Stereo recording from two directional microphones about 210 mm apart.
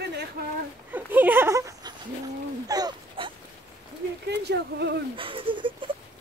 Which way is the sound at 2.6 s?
20° right (ahead or behind).